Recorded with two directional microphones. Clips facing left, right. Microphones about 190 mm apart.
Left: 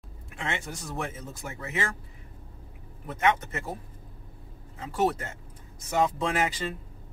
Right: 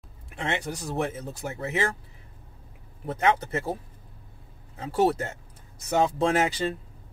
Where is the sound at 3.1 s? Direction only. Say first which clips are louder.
Right 2 dB; 35° right (ahead or behind).